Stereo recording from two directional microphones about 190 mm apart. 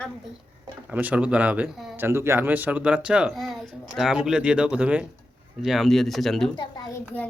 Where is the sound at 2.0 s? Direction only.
15° right (ahead or behind).